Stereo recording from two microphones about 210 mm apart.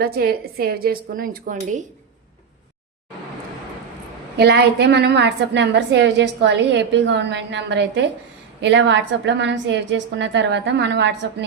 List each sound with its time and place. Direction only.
0.0 s a woman's voice: 45° right (ahead or behind)
4.4 s a woman's voice: 50° right (ahead or behind)